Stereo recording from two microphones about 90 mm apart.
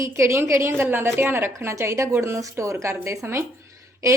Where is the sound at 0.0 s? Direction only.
30° right (ahead or behind).